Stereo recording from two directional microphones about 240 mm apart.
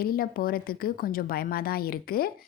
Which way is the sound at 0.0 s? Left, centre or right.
Left.